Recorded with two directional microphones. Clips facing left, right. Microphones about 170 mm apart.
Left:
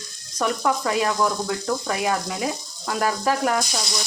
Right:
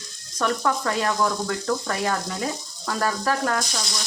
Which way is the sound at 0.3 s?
10° left (ahead or behind).